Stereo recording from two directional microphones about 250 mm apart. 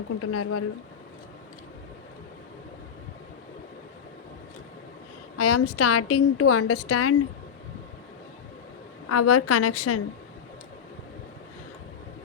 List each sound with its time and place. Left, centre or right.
0.2 s a woman's voice: left
5.4 s a woman's voice: left
9.0 s a woman's voice: left